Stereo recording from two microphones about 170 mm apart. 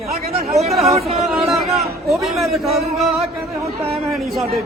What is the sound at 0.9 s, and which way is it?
Speech, 35° right (ahead or behind).